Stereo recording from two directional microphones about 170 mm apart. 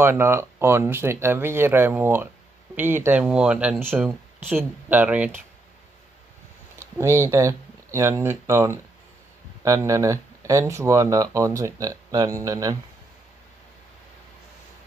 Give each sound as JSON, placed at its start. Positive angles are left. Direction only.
{"t": 0.0, "sound": "speech", "side_deg": -15}
{"t": 7.0, "sound": "speech", "side_deg": -15}